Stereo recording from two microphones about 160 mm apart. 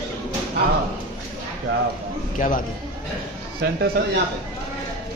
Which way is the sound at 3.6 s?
80° right.